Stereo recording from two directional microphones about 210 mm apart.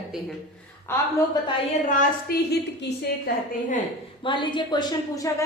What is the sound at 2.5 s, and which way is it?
Speech, 55° left (ahead or behind).